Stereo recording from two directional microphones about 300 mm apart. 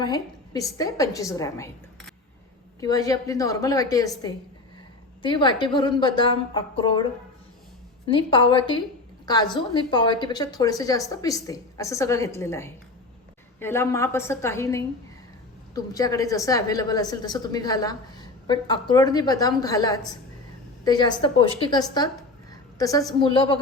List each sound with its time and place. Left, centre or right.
0.0 s a woman's voice: centre
5.2 s a woman's voice: centre
8.0 s a woman's voice: centre